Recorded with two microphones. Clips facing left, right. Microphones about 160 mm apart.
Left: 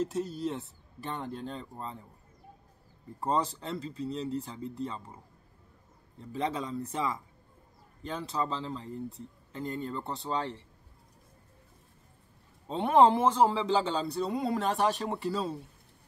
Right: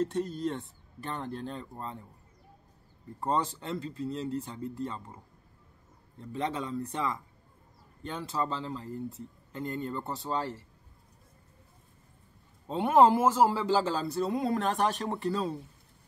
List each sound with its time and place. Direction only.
0.0 s speech: 5° left (ahead or behind)
3.2 s speech: centre (ahead or behind)
6.3 s speech: centre (ahead or behind)
12.6 s speech: 5° right (ahead or behind)